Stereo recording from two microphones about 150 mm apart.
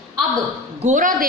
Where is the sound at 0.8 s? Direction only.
60° right (ahead or behind).